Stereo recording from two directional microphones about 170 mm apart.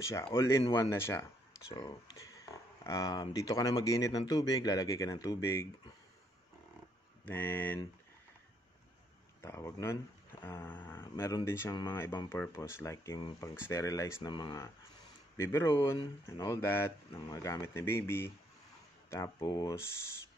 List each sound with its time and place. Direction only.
0.0 s speech: 15° left (ahead or behind)
7.2 s speech: 10° left (ahead or behind)
9.4 s speech: 15° left (ahead or behind)